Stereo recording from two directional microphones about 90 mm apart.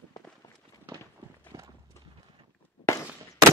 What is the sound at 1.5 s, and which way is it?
Clip-clop, 35° right (ahead or behind).